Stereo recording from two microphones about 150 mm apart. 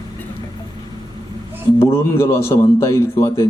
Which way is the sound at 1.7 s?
15° left (ahead or behind).